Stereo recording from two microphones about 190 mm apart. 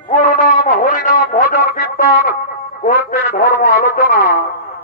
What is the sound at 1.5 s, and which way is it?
Music, 45° left (ahead or behind).